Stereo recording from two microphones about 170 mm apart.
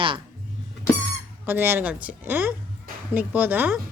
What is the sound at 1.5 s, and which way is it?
Speech, 10° right (ahead or behind).